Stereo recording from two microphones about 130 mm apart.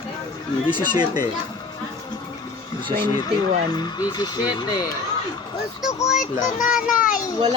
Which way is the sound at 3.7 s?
30° left (ahead or behind).